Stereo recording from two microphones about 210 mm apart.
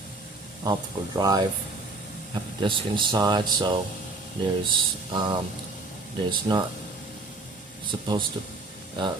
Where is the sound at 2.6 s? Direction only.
25° right (ahead or behind).